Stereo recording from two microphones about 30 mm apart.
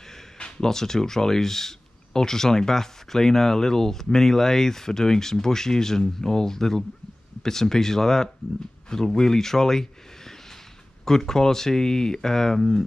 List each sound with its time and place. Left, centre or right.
0.6 s speech: centre